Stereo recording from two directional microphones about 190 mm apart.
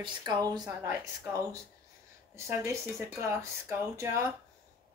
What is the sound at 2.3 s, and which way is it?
Speech, 15° right (ahead or behind).